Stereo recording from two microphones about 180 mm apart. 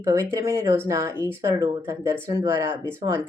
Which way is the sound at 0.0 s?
15° right (ahead or behind).